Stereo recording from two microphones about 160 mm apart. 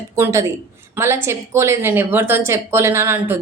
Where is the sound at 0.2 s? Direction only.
15° right (ahead or behind).